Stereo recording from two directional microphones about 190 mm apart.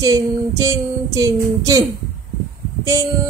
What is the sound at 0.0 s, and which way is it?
Music, 15° right (ahead or behind).